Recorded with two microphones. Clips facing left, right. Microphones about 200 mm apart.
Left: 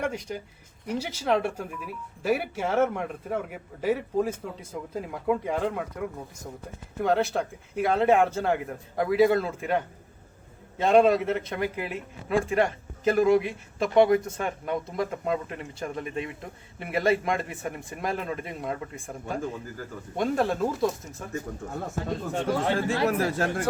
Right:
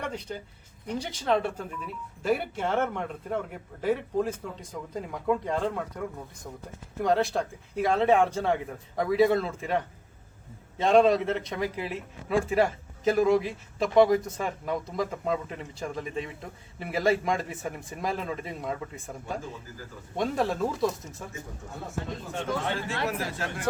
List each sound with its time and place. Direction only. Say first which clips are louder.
0.0 s a man's voice: left 4 dB; 10° left (ahead or behind)
20.1 s a man's voice: left 2 dB; centre (ahead or behind)
22.4 s speech: left 5 dB; 45° left (ahead or behind)